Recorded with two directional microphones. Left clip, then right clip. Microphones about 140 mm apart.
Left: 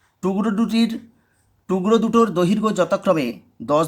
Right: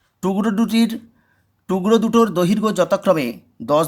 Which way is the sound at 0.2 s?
35° right (ahead or behind).